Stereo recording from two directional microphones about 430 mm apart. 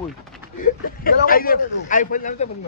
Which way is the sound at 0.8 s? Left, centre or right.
Centre.